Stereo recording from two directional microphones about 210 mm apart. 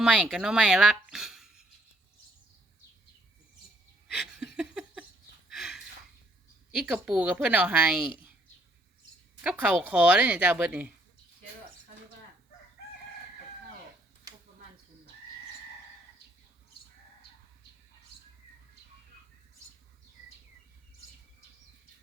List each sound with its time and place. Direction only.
0.0 s speech: 5° right (ahead or behind)
4.1 s a sound: 5° right (ahead or behind)
6.7 s a woman's voice: 5° right (ahead or behind)
9.4 s speech: 5° right (ahead or behind)